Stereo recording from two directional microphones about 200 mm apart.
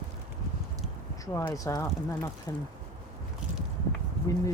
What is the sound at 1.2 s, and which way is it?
Speech, 15° left (ahead or behind).